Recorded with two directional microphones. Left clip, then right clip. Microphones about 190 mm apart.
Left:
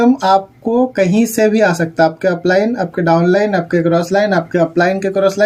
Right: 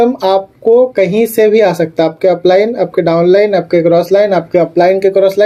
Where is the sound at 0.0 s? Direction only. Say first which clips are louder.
Right 1 dB; 15° right (ahead or behind).